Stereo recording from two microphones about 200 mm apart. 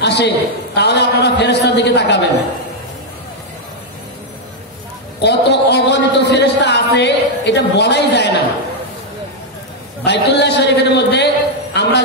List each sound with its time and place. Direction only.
0.0 s a sound: 60° left (ahead or behind)
0.7 s a man's voice: 55° left (ahead or behind)
5.2 s a man's voice: 60° left (ahead or behind)
10.0 s a man's voice: 60° left (ahead or behind)